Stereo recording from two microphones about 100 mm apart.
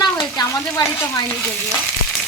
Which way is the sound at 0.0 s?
35° left (ahead or behind).